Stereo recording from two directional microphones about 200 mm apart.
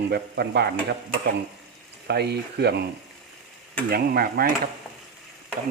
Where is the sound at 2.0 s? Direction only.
55° right (ahead or behind).